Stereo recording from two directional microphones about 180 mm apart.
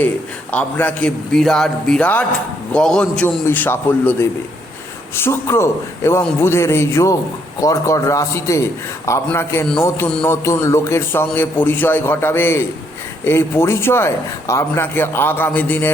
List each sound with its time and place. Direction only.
0.5 s a man's voice: 10° left (ahead or behind)